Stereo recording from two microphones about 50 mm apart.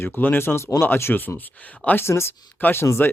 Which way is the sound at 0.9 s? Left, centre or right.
Left.